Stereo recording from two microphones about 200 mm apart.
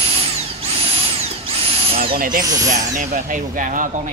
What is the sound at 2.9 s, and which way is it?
Speech, 40° right (ahead or behind).